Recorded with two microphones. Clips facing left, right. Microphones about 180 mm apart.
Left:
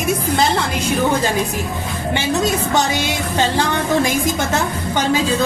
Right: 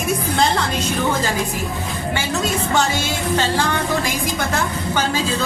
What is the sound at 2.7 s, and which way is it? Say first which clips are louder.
Music: left 2 dB; 15° left (ahead or behind).